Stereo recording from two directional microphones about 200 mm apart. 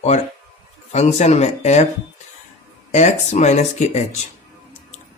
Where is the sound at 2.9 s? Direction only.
35° left (ahead or behind).